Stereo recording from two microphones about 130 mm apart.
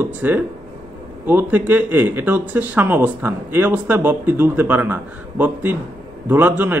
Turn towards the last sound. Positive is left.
turn(degrees=-15)  # may be behind; listen again after turning